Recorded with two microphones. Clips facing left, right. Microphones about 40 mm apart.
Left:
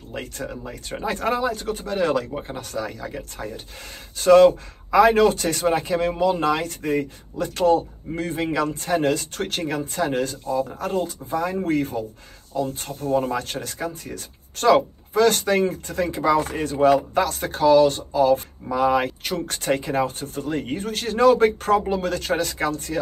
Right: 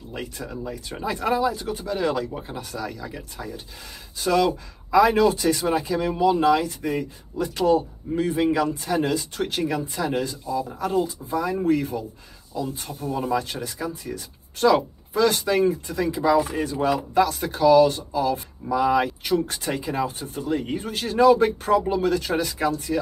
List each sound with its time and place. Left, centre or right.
0.1 s speech: left
2.3 s speech: left
2.7 s speech: left